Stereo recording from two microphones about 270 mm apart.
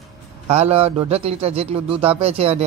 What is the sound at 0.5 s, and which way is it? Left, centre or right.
A man's voice, right.